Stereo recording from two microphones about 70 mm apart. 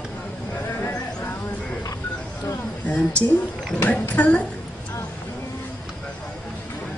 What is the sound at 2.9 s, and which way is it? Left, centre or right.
A woman's voice, centre.